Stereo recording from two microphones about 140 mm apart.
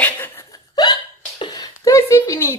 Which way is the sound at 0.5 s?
30° left (ahead or behind).